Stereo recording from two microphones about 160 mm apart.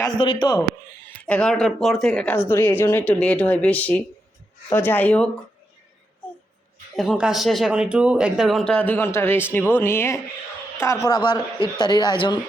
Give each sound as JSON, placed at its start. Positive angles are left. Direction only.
{"t": 0.2, "sound": "a man's voice", "side_deg": 30}
{"t": 1.2, "sound": "a woman's voice", "side_deg": 5}
{"t": 6.9, "sound": "a man's voice", "side_deg": 0}